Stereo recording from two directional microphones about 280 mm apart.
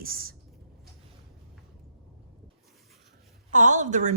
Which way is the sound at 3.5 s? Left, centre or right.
Right.